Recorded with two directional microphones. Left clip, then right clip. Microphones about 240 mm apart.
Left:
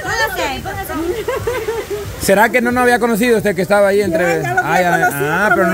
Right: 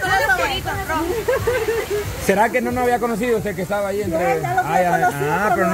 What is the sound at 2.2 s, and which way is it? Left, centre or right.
Speech, left.